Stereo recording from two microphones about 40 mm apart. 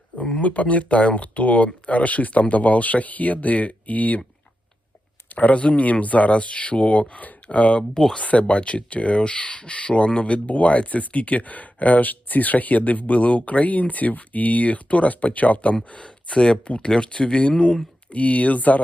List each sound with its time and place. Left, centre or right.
0.2 s speech: centre
0.4 s speech: left
5.3 s speech: left